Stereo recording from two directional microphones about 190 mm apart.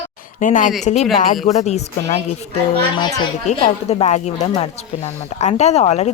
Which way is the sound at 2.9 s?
20° left (ahead or behind).